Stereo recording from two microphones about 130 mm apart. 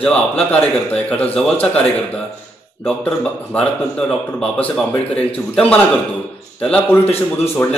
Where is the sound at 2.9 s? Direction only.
5° left (ahead or behind).